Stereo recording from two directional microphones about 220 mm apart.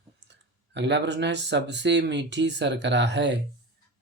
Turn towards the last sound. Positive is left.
turn(degrees=-55)  # may be behind; listen again after turning